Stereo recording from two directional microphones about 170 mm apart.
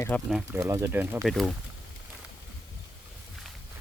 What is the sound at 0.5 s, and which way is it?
Speech, 15° right (ahead or behind).